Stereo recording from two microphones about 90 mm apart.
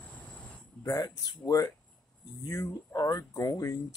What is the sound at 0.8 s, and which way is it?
Speech, 40° left (ahead or behind).